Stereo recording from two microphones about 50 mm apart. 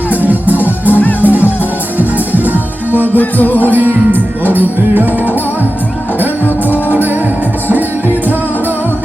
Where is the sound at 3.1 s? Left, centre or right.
Left.